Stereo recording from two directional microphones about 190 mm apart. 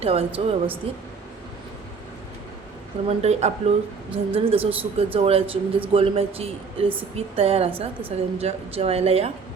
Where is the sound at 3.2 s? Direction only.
35° right (ahead or behind).